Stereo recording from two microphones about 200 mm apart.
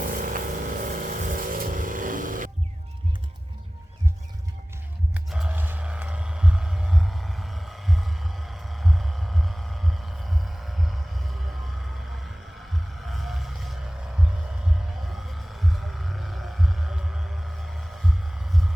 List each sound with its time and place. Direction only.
0.0 s vehicle: 45° right (ahead or behind)
5.1 s music: 5° right (ahead or behind)
10.4 s hum: centre (ahead or behind)
13.1 s boat: centre (ahead or behind)
15.1 s vehicle: centre (ahead or behind)
17.6 s a sound: centre (ahead or behind)